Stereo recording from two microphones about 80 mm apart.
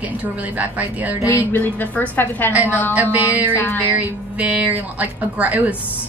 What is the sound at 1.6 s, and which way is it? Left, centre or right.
A woman's voice, left.